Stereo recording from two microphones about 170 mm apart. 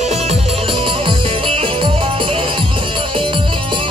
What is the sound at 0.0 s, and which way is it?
Music, 35° right (ahead or behind).